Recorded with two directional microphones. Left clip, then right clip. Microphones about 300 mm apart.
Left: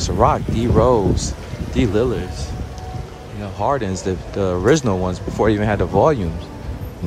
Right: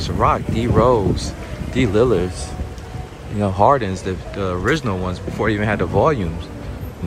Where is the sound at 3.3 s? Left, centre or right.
Centre.